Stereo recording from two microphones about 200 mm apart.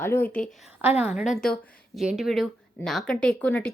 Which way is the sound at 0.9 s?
30° left (ahead or behind).